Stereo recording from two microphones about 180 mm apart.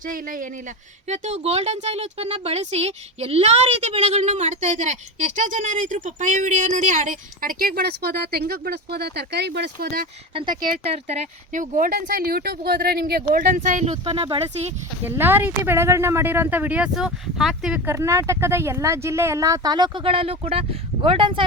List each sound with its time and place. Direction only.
0.0 s speech: 50° right (ahead or behind)
1.0 s speech: 40° right (ahead or behind); by 10.1 s 55° right (ahead or behind)
10.3 s speech: 25° right (ahead or behind)
11.5 s speech: 45° right (ahead or behind); by 14.3 s 30° right (ahead or behind)
15.0 s speech: 10° right (ahead or behind)
17.8 s speech: 15° right (ahead or behind)